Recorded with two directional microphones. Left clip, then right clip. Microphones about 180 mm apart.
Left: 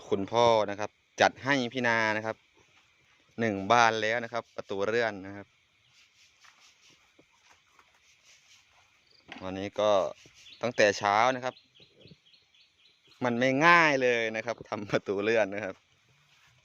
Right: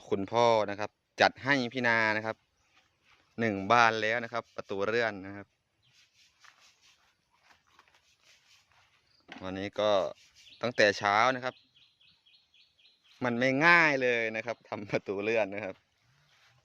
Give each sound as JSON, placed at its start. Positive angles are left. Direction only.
{"t": 0.0, "sound": "speech", "side_deg": 0}
{"t": 9.2, "sound": "speech", "side_deg": 5}
{"t": 13.1, "sound": "speech", "side_deg": 5}